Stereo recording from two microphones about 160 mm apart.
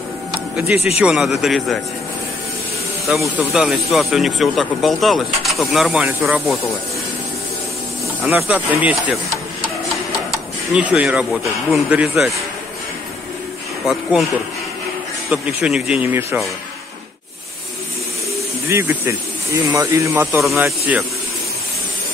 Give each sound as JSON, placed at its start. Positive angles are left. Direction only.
{"t": 0.3, "sound": "music", "side_deg": -5}
{"t": 0.9, "sound": "speech", "side_deg": -5}
{"t": 3.1, "sound": "speech", "side_deg": -5}
{"t": 8.4, "sound": "speech", "side_deg": -10}
{"t": 10.7, "sound": "speech", "side_deg": -5}
{"t": 15.2, "sound": "speech", "side_deg": -5}
{"t": 18.7, "sound": "speech", "side_deg": -15}